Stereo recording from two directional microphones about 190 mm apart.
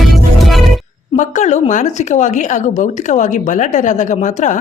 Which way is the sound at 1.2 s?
40° left (ahead or behind).